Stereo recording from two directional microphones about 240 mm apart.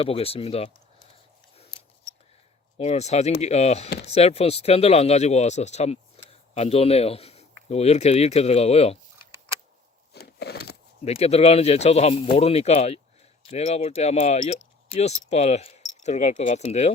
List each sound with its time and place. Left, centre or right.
0.0 s speech: left
2.7 s speech: left
6.2 s a sound: left
6.5 s a man's voice: left
10.1 s a sound: left
11.0 s speech: left